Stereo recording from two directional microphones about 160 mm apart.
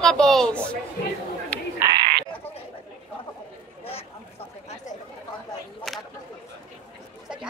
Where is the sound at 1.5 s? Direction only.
10° left (ahead or behind).